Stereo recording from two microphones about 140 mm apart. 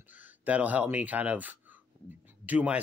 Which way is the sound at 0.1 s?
10° right (ahead or behind).